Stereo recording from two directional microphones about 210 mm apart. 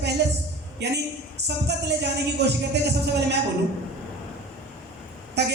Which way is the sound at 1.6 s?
55° right (ahead or behind).